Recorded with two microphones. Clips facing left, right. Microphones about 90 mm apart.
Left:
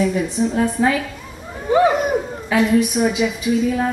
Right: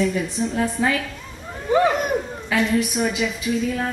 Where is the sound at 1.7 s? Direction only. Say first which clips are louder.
Left 3 dB; 5° left (ahead or behind).